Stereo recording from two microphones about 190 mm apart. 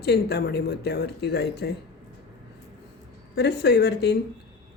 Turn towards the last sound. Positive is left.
turn(degrees=60)  # may be behind; listen again after turning